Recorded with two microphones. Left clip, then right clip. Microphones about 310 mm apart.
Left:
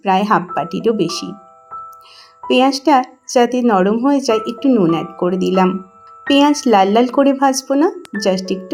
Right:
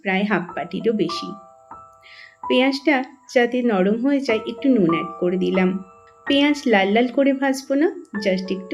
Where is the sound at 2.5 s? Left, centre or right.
Centre.